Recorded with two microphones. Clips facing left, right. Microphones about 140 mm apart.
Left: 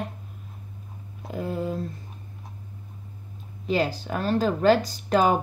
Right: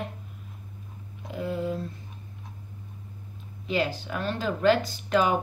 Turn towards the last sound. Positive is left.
turn(degrees=40)  # may be behind; listen again after turning